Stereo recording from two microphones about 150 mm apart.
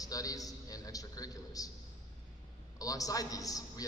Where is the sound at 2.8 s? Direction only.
25° left (ahead or behind).